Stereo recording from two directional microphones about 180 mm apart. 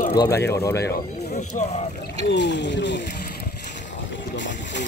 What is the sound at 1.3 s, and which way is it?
Speech, 40° left (ahead or behind).